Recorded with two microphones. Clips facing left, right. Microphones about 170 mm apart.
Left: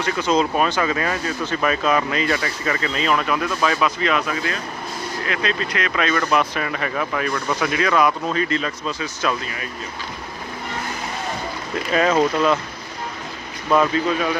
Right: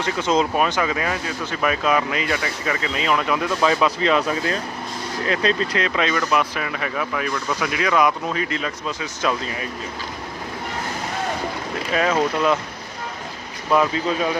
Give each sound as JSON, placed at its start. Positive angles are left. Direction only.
{"t": 0.0, "sound": "speech", "side_deg": -25}
{"t": 6.1, "sound": "speech", "side_deg": -10}
{"t": 7.8, "sound": "speech", "side_deg": -15}
{"t": 11.9, "sound": "speech", "side_deg": -5}
{"t": 13.7, "sound": "speech", "side_deg": -5}
{"t": 13.9, "sound": "speech", "side_deg": -25}